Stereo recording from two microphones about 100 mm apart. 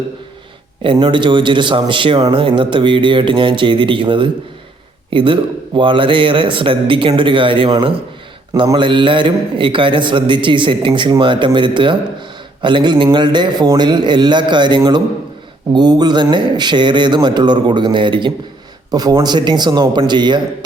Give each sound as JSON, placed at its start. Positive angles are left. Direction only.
{"t": 0.8, "sound": "a man's voice", "side_deg": -55}
{"t": 8.6, "sound": "a man's voice", "side_deg": -50}
{"t": 18.9, "sound": "speech", "side_deg": -40}